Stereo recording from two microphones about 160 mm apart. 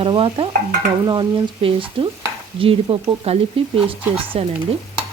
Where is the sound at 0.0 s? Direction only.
35° right (ahead or behind).